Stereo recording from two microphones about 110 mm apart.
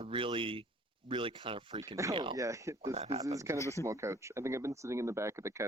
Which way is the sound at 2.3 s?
30° right (ahead or behind).